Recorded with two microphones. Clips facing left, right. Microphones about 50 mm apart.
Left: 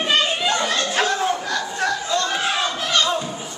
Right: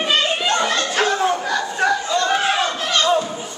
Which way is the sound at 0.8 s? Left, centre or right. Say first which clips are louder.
Right 2 dB; centre.